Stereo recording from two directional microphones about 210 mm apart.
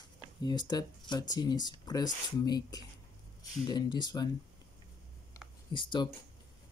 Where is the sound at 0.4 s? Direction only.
20° left (ahead or behind).